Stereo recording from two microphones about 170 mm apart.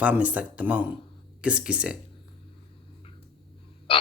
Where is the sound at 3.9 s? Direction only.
35° left (ahead or behind).